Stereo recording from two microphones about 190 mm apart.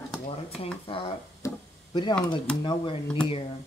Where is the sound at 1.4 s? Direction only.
20° left (ahead or behind).